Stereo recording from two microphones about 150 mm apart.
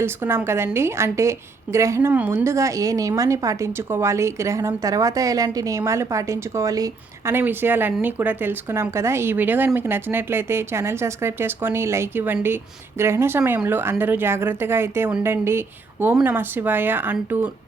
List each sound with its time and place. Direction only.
0.0 s a woman's voice: 15° right (ahead or behind)